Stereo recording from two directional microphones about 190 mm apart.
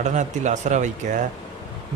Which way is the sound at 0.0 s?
40° right (ahead or behind).